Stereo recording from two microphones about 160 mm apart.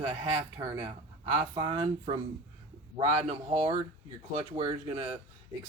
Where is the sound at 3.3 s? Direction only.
40° right (ahead or behind).